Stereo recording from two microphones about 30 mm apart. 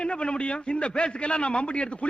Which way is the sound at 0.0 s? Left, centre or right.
Left.